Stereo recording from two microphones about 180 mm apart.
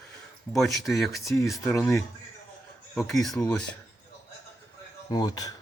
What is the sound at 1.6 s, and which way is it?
Speech, 15° left (ahead or behind).